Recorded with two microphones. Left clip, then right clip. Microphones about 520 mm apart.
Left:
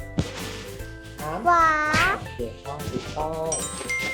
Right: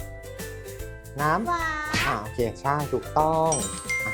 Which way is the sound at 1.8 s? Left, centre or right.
Centre.